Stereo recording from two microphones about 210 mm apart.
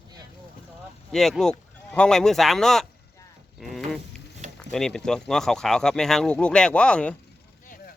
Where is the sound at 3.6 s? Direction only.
Centre (ahead or behind).